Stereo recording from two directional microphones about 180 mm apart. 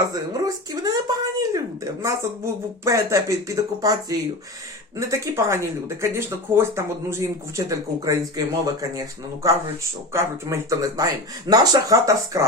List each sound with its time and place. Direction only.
0.1 s speech: 20° right (ahead or behind)